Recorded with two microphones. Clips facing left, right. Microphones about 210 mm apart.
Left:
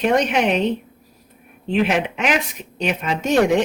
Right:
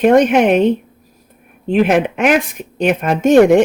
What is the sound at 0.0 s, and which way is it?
Speech, 50° right (ahead or behind).